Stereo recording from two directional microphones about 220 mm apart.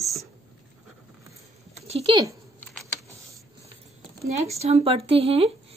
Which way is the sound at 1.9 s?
30° right (ahead or behind).